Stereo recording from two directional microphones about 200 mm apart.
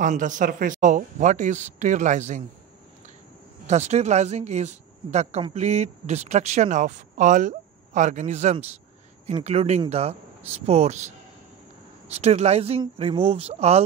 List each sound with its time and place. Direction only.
0.0 s speech: 40° right (ahead or behind)
3.6 s speech: 35° right (ahead or behind)